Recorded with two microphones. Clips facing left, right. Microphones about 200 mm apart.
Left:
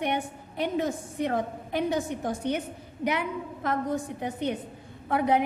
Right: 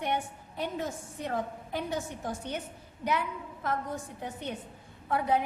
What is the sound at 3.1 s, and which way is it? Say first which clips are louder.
Speech: left 3 dB; 80° left.